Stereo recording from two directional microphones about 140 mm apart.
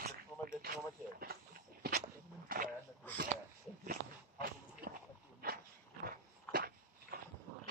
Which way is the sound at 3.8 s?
90° right.